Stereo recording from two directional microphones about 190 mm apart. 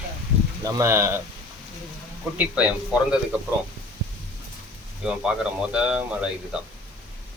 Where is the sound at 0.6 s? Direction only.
15° right (ahead or behind).